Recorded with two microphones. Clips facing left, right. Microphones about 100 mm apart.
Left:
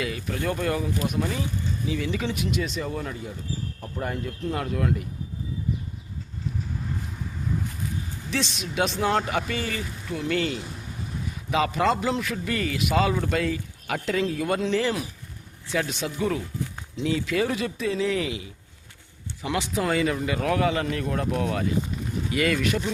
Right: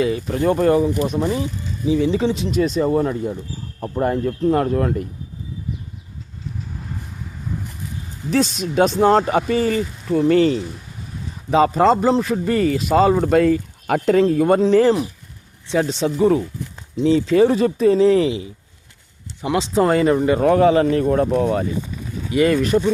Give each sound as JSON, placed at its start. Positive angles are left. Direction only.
{"t": 0.0, "sound": "a man's voice", "side_deg": -30}
{"t": 2.5, "sound": "speech", "side_deg": -40}
{"t": 8.3, "sound": "a man's voice", "side_deg": -40}
{"t": 15.7, "sound": "a man's voice", "side_deg": -30}
{"t": 19.8, "sound": "a man's voice", "side_deg": -40}
{"t": 22.5, "sound": "a man's voice", "side_deg": -40}